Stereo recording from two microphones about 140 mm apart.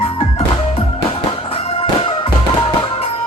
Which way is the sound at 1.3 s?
45° left (ahead or behind).